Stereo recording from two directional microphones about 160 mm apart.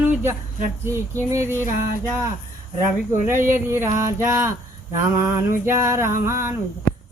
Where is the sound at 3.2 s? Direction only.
15° right (ahead or behind).